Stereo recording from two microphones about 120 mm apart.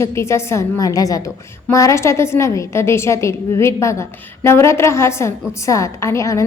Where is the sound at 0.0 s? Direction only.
25° left (ahead or behind).